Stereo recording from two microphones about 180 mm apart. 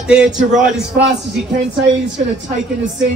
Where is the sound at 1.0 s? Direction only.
60° right (ahead or behind).